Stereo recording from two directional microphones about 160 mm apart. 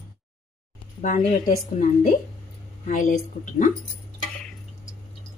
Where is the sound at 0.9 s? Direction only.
50° left (ahead or behind).